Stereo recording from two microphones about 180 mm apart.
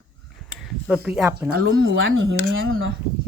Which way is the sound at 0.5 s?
5° right (ahead or behind).